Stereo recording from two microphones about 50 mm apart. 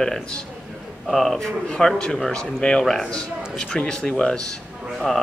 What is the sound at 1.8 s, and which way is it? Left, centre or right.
A man's voice, centre.